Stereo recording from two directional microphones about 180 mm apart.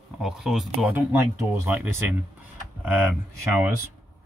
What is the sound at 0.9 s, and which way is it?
Speech, 10° right (ahead or behind).